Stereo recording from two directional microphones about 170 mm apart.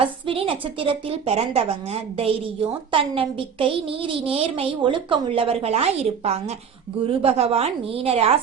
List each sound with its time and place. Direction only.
0.0 s a woman's voice: 35° right (ahead or behind)